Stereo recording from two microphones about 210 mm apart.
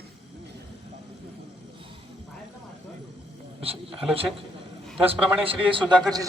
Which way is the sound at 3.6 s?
25° right (ahead or behind).